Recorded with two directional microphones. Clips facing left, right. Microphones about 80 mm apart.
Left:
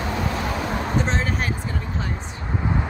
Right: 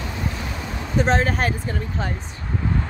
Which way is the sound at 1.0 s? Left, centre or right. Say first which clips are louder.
Right 5 dB; right.